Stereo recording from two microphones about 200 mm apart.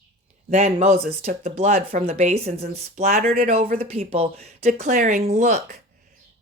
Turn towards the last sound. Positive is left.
turn(degrees=-35)  # may be behind; listen again after turning